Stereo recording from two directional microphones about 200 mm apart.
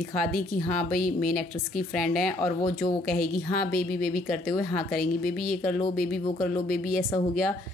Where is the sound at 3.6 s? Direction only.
50° left (ahead or behind).